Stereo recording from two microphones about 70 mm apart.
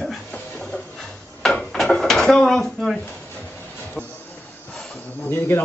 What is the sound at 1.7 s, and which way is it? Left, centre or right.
Drawer open or close, centre.